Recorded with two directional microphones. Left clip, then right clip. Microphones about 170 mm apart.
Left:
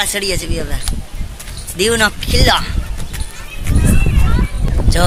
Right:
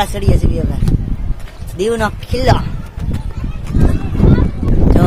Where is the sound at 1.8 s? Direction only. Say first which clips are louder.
Left 2 dB; centre (ahead or behind).